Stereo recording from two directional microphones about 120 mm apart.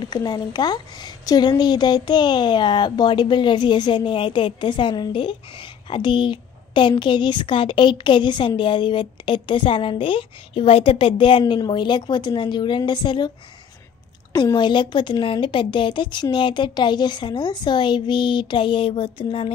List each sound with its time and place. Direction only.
0.0 s a woman's voice: 35° left (ahead or behind)
14.3 s a woman's voice: 35° left (ahead or behind)